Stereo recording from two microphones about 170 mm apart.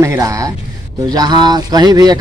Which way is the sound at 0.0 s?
20° right (ahead or behind).